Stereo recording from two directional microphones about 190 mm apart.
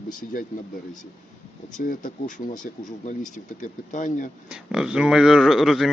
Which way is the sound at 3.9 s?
40° left (ahead or behind).